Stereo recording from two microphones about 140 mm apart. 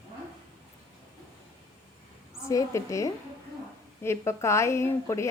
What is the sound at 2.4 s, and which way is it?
A woman's voice, 25° left (ahead or behind).